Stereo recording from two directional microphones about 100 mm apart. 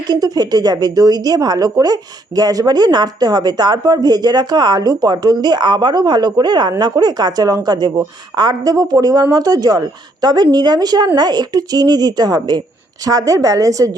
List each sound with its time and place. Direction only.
0.1 s a woman's voice: 45° right (ahead or behind)